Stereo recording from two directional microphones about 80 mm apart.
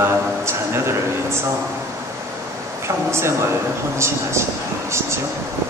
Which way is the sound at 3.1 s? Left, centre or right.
Right.